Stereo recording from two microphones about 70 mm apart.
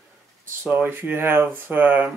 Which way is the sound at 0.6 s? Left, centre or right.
Right.